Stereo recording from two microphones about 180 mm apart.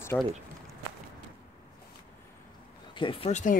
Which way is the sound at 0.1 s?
10° left (ahead or behind).